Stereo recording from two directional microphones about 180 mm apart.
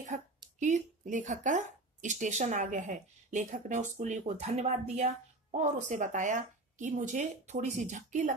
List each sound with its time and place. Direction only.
0.1 s speech: 45° right (ahead or behind)